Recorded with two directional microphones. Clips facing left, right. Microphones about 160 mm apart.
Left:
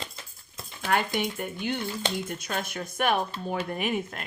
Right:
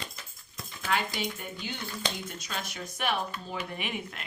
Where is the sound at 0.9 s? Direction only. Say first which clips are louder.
Left 4 dB; 50° left (ahead or behind).